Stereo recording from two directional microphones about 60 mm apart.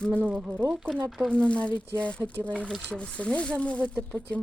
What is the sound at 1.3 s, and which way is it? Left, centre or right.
Speech, centre.